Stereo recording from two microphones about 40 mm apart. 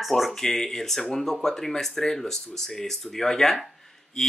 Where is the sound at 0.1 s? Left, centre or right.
Centre.